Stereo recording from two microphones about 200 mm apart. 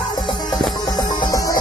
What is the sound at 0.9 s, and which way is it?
Music, 20° left (ahead or behind).